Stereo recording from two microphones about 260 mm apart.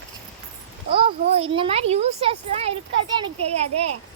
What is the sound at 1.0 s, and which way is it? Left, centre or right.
A child's voice, right.